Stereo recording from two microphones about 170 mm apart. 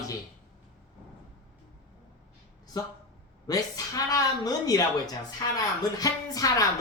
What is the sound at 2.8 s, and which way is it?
Speech, 25° left (ahead or behind).